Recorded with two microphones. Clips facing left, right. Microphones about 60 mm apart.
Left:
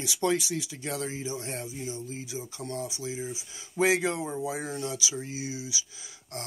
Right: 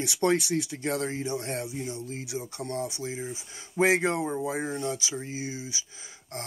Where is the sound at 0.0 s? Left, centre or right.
Right.